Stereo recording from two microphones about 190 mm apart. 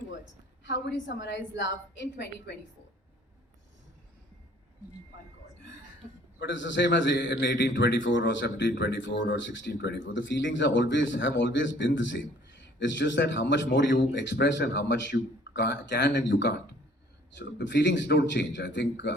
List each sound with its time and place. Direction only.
0.6 s a man's voice: 75° left (ahead or behind)
6.4 s a man's voice: 70° left (ahead or behind)